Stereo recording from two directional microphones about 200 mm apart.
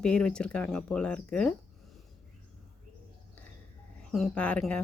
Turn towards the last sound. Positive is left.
turn(degrees=5)  # may be behind; listen again after turning